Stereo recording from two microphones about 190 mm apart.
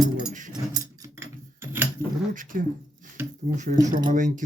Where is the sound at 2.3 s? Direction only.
45° right (ahead or behind).